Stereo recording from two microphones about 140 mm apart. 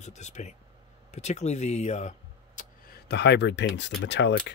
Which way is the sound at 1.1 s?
55° left (ahead or behind).